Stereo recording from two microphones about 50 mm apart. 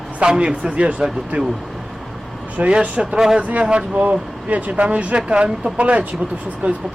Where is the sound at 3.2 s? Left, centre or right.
Centre.